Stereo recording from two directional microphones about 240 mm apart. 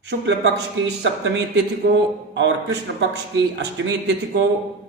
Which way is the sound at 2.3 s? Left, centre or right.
Right.